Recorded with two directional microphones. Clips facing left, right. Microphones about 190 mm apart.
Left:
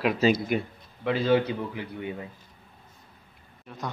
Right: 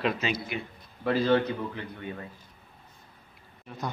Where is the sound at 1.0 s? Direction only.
10° left (ahead or behind).